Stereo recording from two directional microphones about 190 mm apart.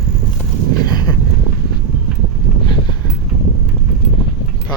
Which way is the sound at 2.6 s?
25° left (ahead or behind).